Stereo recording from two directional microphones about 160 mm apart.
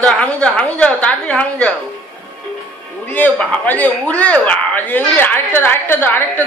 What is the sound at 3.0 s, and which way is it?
A man's voice, 10° left (ahead or behind).